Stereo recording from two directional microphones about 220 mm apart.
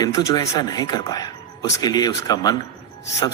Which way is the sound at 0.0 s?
15° left (ahead or behind).